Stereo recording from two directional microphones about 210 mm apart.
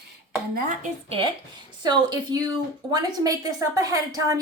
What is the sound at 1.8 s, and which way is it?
A woman's voice, 20° right (ahead or behind).